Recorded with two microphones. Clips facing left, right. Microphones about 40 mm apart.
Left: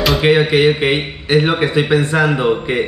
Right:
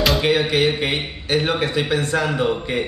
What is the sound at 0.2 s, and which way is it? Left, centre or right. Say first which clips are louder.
Speech: left 6 dB; left.